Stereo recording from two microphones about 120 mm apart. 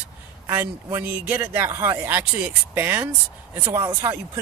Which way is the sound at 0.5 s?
20° right (ahead or behind).